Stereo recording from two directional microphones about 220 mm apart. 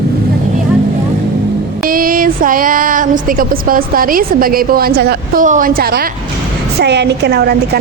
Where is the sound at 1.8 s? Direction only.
40° right (ahead or behind).